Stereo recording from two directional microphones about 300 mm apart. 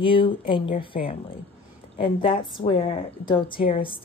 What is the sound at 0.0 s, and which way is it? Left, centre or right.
Speech, centre.